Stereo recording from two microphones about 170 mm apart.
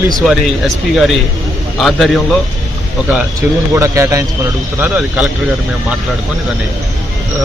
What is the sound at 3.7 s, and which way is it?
A man's voice, 15° right (ahead or behind).